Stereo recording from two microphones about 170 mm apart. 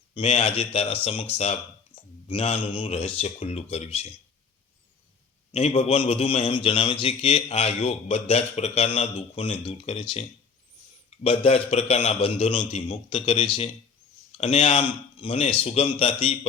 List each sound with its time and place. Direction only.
0.1 s a man's voice: 35° left (ahead or behind)
5.5 s a man's voice: 40° left (ahead or behind)